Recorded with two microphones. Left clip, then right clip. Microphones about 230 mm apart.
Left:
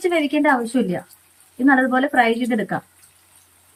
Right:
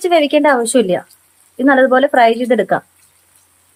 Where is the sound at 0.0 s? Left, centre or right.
Right.